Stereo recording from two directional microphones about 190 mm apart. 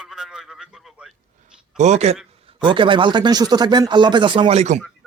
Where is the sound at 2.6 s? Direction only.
25° right (ahead or behind).